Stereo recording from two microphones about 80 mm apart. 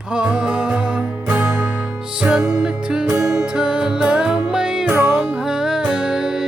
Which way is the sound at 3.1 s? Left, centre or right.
Right.